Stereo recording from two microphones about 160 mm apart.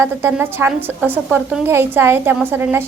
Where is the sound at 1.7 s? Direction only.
15° right (ahead or behind).